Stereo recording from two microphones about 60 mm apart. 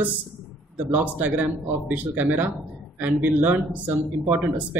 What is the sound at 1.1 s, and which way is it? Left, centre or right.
A man's voice, right.